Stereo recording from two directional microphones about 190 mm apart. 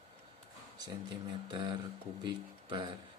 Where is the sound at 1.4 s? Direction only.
25° right (ahead or behind).